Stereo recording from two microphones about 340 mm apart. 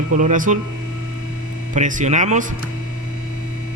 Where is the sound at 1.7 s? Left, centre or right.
Right.